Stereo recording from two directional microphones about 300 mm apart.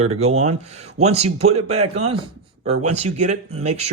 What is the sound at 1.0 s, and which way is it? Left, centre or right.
Speech, right.